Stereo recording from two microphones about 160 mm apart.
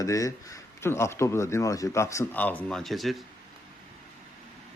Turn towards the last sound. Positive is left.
turn(degrees=0)  # may be behind; listen again after turning